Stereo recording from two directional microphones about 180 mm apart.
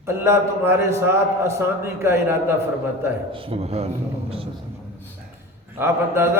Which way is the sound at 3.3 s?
30° right (ahead or behind).